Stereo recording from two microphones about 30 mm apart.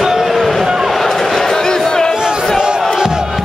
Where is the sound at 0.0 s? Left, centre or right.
Centre.